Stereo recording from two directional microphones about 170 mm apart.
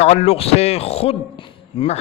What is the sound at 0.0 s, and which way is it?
A man's voice, 40° left (ahead or behind).